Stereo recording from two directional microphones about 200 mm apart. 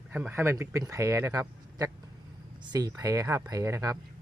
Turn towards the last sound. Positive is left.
turn(degrees=-15)  # may be behind; listen again after turning